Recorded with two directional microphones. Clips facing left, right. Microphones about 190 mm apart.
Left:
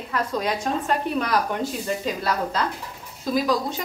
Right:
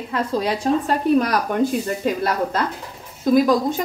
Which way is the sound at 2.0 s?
50° right (ahead or behind).